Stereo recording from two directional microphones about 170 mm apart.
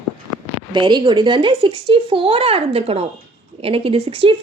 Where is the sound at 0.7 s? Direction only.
25° right (ahead or behind).